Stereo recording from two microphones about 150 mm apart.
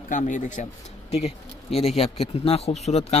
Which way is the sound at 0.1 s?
55° left (ahead or behind).